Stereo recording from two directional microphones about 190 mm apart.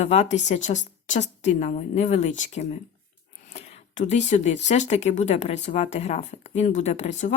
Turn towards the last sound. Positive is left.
turn(degrees=35)  # may be behind; listen again after turning